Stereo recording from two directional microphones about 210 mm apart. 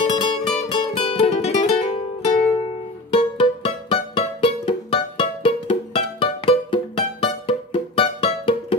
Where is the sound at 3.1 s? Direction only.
25° left (ahead or behind).